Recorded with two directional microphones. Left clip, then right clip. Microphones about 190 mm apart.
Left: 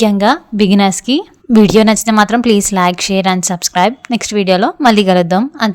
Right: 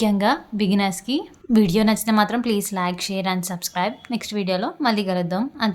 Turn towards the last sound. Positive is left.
turn(degrees=45)  # may be behind; listen again after turning